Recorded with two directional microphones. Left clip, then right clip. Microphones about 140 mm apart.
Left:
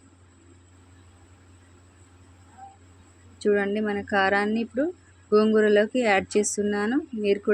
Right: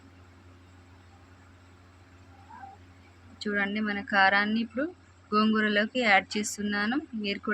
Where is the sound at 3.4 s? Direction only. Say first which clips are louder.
Left 6 dB; 20° left (ahead or behind).